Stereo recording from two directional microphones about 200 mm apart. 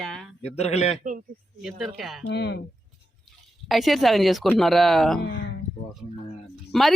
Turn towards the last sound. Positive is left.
turn(degrees=0)  # may be behind; listen again after turning